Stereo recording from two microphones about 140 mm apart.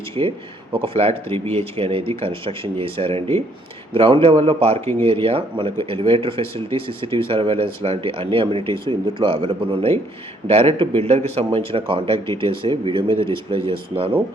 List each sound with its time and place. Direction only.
0.2 s speech: 40° right (ahead or behind)